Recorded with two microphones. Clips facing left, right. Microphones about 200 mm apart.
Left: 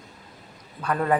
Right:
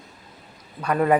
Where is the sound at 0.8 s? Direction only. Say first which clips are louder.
Right 4 dB; 10° right (ahead or behind).